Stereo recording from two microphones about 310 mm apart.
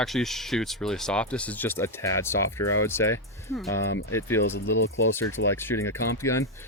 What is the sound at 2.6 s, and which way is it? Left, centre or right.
Speech, left.